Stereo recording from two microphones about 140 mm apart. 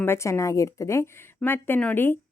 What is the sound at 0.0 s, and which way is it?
Speech, 20° left (ahead or behind).